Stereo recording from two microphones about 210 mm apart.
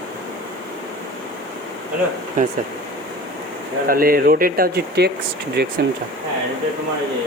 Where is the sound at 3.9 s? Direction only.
45° right (ahead or behind).